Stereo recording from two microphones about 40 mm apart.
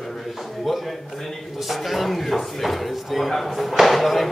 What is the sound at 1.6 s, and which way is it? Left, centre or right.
A man's voice, centre.